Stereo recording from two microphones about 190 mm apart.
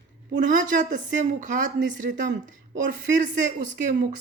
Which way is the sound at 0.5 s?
45° right (ahead or behind).